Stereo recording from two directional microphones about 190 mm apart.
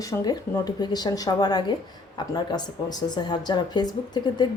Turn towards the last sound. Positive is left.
turn(degrees=20)  # may be behind; listen again after turning